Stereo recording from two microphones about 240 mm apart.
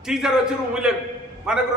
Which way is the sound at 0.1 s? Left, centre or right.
Centre.